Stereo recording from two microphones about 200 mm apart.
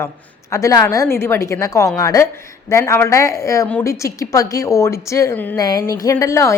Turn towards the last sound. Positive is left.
turn(degrees=15)  # may be behind; listen again after turning